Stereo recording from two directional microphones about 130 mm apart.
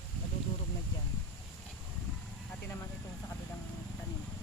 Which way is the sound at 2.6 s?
15° left (ahead or behind).